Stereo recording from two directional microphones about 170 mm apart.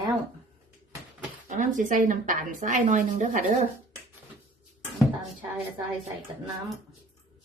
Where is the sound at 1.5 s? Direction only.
50° right (ahead or behind).